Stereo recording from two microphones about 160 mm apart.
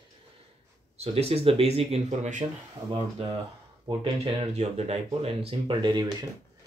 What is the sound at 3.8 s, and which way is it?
Speech, 35° right (ahead or behind).